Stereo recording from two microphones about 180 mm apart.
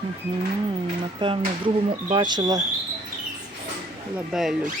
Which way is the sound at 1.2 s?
30° right (ahead or behind).